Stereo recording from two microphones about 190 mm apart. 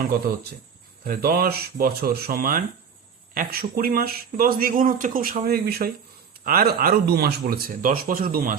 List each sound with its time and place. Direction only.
0.3 s speech: 55° right (ahead or behind)